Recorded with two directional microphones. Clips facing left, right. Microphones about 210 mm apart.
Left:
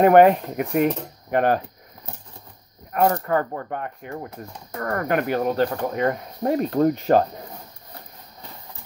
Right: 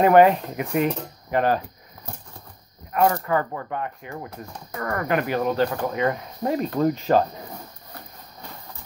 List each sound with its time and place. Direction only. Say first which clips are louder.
0.0 s speech: left 2 dB; 50° left (ahead or behind)
3.3 s speech: left 1 dB; 45° left (ahead or behind)